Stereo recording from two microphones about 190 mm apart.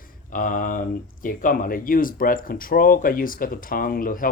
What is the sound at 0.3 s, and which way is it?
Speech, 45° left (ahead or behind).